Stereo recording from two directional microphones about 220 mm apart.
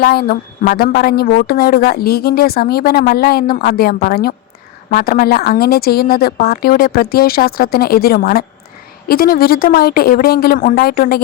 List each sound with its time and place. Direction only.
0.0 s a woman's voice: 45° left (ahead or behind)